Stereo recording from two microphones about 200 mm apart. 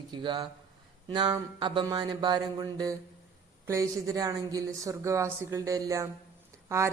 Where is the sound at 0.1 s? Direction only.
25° right (ahead or behind).